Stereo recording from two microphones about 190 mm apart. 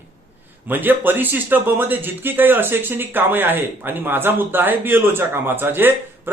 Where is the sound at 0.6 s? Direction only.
10° right (ahead or behind).